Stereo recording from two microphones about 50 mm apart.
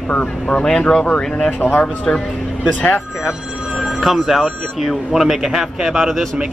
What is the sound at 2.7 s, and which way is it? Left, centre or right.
Speech, left.